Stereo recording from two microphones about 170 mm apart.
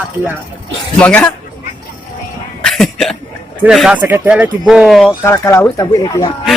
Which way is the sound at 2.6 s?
Centre (ahead or behind).